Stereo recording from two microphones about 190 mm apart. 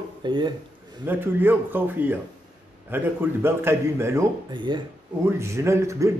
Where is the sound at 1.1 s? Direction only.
10° right (ahead or behind).